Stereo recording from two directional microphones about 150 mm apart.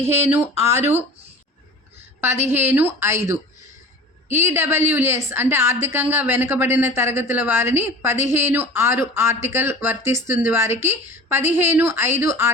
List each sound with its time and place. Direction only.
0.0 s a woman's voice: 15° right (ahead or behind)
2.2 s a woman's voice: 15° right (ahead or behind)